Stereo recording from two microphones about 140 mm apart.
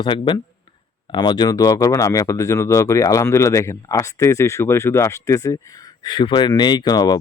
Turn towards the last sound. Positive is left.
turn(degrees=30)  # may be behind; listen again after turning